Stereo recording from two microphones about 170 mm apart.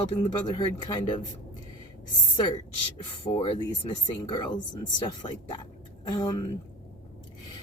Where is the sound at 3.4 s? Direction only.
30° left (ahead or behind).